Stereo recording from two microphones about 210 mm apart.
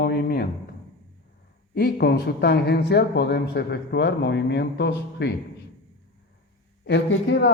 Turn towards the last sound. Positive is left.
turn(degrees=55)  # may be behind; listen again after turning